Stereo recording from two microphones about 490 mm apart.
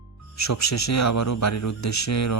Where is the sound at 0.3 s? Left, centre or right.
Left.